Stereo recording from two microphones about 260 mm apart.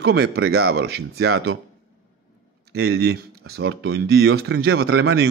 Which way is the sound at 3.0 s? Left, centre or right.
Right.